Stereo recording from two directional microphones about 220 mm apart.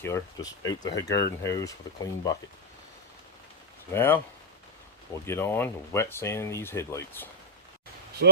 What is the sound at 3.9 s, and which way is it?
Speech, 10° left (ahead or behind).